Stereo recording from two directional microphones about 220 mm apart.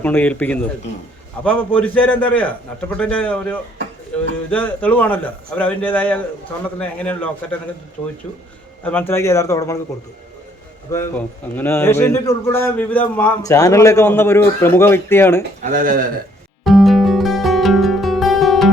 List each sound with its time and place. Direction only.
0.0 s a man's voice: 5° left (ahead or behind)
8.8 s a man's voice: 10° left (ahead or behind)
10.9 s a man's voice: 10° left (ahead or behind)
15.6 s speech: 35° right (ahead or behind)
16.6 s music: centre (ahead or behind)